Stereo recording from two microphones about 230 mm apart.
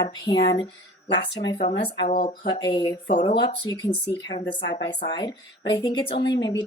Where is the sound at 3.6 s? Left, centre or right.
Centre.